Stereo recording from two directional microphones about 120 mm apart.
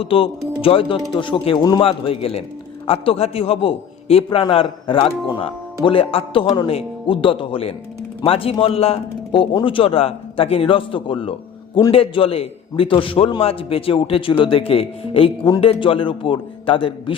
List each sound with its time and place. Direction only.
0.0 s speech: 50° left (ahead or behind)
1.8 s speech: 50° left (ahead or behind)